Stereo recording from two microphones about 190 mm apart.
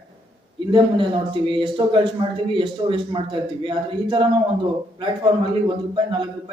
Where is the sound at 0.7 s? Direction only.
25° right (ahead or behind).